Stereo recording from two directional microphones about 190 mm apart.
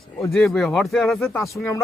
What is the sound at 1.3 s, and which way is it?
Speech, 15° left (ahead or behind).